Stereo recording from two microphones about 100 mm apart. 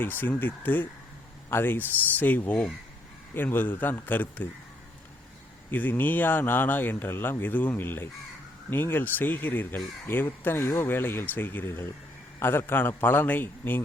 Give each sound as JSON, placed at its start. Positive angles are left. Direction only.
{"t": 0.0, "sound": "speech", "side_deg": 20}
{"t": 5.7, "sound": "speech", "side_deg": 20}